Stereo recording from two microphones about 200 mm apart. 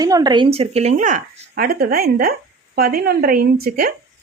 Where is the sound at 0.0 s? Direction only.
20° right (ahead or behind).